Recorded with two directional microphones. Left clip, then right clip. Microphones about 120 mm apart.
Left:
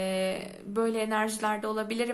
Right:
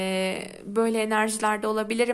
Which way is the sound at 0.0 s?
40° right (ahead or behind).